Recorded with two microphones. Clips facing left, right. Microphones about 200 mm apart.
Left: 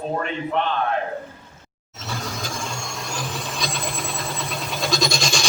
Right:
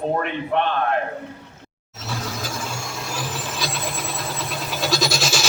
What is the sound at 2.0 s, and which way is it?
Vehicle, centre (ahead or behind).